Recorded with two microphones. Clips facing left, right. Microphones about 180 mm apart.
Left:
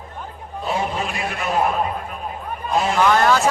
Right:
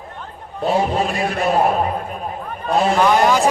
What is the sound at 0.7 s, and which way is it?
Speech, 35° right (ahead or behind).